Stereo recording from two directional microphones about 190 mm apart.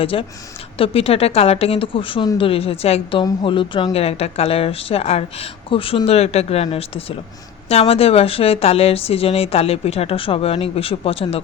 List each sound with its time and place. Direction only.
0.0 s speech: 30° left (ahead or behind)